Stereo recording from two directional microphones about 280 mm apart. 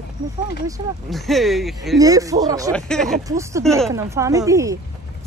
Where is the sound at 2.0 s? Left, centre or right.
Centre.